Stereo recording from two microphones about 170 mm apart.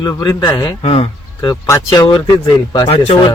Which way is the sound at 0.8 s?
35° left (ahead or behind).